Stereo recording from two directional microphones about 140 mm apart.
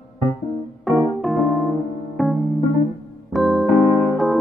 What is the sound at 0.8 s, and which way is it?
Keyboard, centre (ahead or behind).